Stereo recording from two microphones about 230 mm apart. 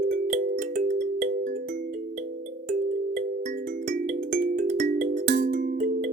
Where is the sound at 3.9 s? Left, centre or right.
Right.